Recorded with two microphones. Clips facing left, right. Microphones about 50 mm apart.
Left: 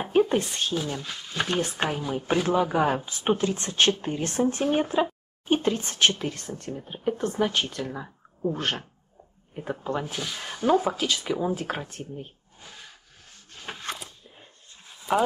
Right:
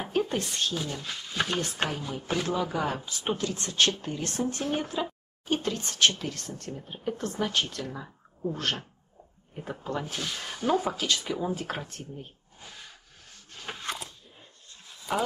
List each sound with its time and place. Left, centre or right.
0.0 s a sound: left
0.7 s speech: centre
1.6 s speech: left
15.1 s speech: centre